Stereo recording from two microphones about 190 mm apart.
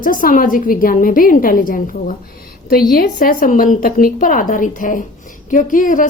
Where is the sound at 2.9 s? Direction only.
50° left (ahead or behind).